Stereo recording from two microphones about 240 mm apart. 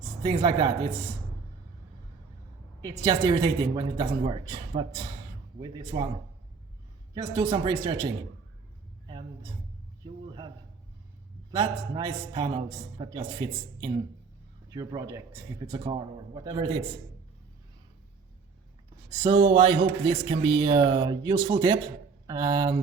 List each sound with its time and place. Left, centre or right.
0.2 s a man's voice: right
3.0 s a man's voice: centre
7.1 s speech: centre
11.5 s a man's voice: centre
19.2 s speech: right